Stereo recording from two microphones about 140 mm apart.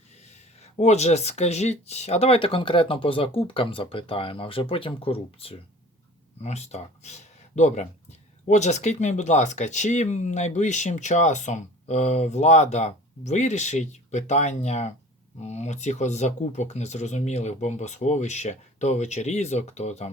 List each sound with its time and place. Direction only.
0.3 s speech: 50° left (ahead or behind)